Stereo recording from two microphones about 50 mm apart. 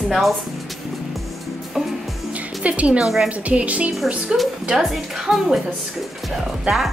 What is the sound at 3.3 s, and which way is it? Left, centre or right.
Speech, right.